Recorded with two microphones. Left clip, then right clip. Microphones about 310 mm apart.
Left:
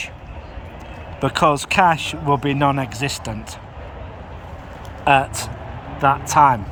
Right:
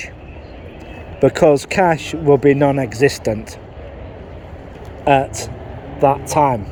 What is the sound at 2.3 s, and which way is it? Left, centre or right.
Speech, left.